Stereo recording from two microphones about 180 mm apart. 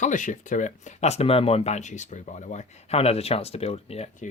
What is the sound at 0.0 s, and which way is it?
Speech, 45° left (ahead or behind).